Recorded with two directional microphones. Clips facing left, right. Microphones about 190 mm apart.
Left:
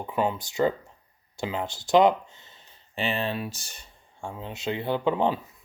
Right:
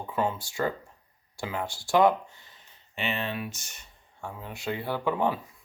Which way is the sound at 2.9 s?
30° left (ahead or behind).